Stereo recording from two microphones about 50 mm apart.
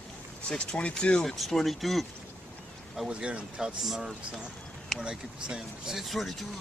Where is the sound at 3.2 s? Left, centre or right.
Right.